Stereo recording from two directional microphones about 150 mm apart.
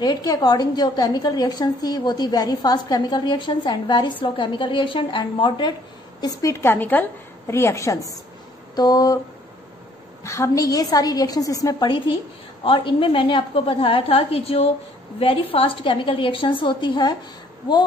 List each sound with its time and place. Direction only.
0.0 s a woman's voice: 25° left (ahead or behind)
6.2 s a woman's voice: 20° left (ahead or behind)
10.2 s a woman's voice: 20° left (ahead or behind)